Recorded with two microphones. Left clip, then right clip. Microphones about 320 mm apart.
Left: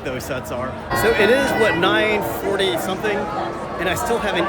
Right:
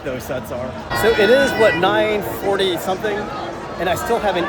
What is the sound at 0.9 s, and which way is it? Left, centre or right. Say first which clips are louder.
Speech: right 1 dB; right.